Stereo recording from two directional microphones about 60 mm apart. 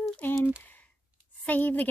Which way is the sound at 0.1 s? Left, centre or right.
Left.